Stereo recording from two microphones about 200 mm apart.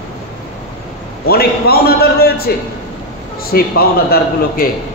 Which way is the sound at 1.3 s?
50° left (ahead or behind).